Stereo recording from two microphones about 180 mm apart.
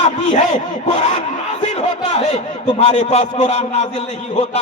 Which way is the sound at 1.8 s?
35° left (ahead or behind).